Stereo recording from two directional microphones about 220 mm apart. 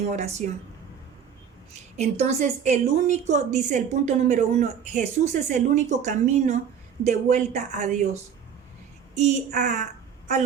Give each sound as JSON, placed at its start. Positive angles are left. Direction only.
{"t": 0.0, "sound": "a woman's voice", "side_deg": -30}
{"t": 2.0, "sound": "a woman's voice", "side_deg": -30}